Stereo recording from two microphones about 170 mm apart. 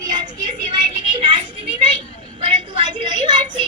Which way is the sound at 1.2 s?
30° right (ahead or behind).